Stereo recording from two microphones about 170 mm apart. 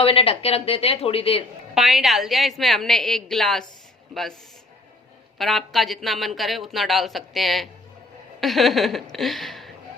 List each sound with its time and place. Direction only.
0.0 s speech: 35° left (ahead or behind)
1.7 s speech: centre (ahead or behind)
5.4 s speech: centre (ahead or behind)